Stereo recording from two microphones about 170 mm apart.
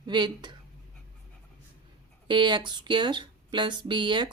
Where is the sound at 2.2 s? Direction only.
25° right (ahead or behind).